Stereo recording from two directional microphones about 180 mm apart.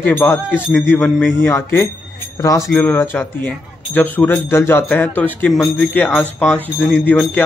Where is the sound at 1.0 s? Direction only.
10° left (ahead or behind).